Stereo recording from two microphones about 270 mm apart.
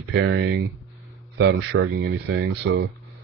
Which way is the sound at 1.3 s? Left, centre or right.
Right.